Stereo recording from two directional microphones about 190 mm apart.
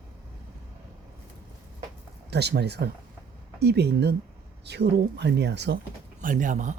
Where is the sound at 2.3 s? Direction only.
60° right (ahead or behind).